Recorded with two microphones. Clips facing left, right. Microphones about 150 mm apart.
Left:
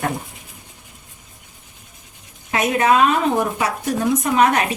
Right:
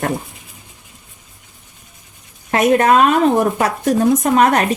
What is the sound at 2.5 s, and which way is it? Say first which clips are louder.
Speech: right 5 dB; 50° right (ahead or behind).